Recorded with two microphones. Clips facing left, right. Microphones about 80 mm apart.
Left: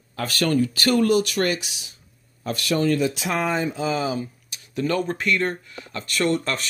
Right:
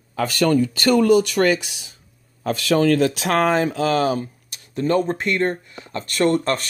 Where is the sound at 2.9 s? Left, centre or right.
Right.